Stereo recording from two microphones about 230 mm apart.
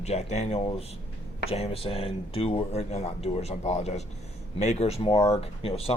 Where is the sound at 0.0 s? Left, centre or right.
Left.